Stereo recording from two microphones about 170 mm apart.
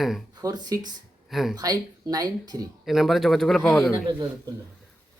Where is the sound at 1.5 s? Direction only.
20° right (ahead or behind).